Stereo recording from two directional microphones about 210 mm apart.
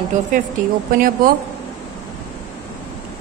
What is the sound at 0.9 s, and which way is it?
Speech, 40° right (ahead or behind).